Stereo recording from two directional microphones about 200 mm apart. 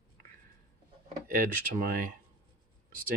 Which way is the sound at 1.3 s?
45° right (ahead or behind).